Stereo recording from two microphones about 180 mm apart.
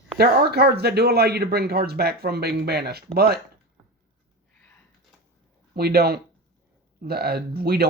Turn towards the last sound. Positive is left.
turn(degrees=-60)  # may be behind; listen again after turning